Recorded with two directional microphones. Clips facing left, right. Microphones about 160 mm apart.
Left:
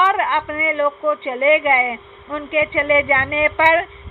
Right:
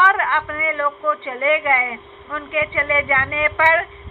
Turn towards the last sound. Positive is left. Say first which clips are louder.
# left 3 dB
turn(degrees=20)  # may be behind; listen again after turning